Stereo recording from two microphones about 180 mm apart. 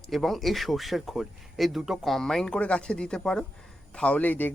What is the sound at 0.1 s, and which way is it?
Speech, centre (ahead or behind).